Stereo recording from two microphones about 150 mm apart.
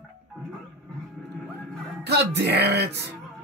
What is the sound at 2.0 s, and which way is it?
Speech, 90° right.